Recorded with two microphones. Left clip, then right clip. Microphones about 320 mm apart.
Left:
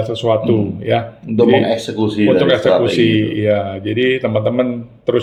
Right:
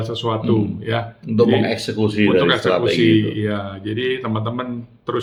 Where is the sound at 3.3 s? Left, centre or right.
Centre.